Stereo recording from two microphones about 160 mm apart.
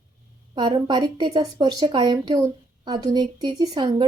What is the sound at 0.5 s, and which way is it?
A woman's voice, 30° right (ahead or behind).